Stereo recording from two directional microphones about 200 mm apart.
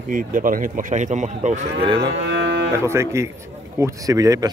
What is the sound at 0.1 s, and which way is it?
Speech, 45° right (ahead or behind).